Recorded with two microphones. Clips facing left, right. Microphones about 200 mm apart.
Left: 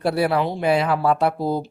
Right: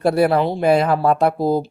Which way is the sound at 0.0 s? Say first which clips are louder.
Right 4 dB; 45° right (ahead or behind).